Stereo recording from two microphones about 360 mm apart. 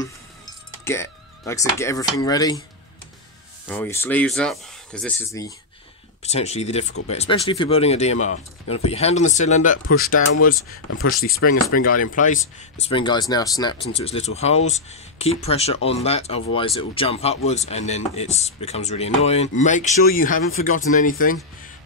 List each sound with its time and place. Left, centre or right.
0.0 s speech: centre
3.6 s speech: centre
6.2 s speech: centre
10.5 s speech: left